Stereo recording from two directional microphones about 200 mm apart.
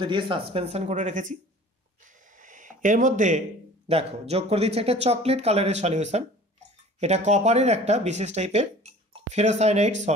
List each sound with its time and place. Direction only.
0.0 s speech: 25° right (ahead or behind)
2.0 s a sound: 40° right (ahead or behind)
3.9 s speech: 30° right (ahead or behind)